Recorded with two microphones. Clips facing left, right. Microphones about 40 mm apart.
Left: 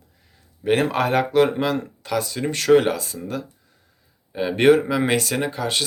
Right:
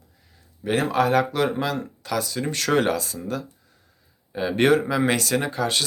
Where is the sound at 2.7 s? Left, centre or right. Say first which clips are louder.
Left 3 dB; centre.